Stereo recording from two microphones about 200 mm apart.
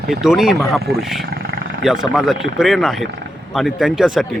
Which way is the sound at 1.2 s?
50° right (ahead or behind).